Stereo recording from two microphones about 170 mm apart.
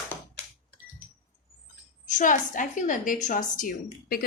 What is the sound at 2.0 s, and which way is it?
A woman's voice, 50° left (ahead or behind).